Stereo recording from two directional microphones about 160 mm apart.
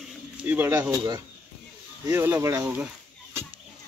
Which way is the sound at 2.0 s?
15° right (ahead or behind).